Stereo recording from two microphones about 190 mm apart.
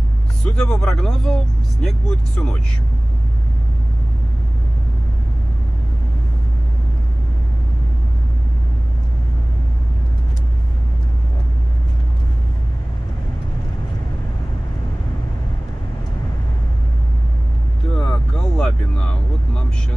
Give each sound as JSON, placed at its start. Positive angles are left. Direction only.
{"t": 0.5, "sound": "speech", "side_deg": 5}
{"t": 17.9, "sound": "vehicle", "side_deg": 5}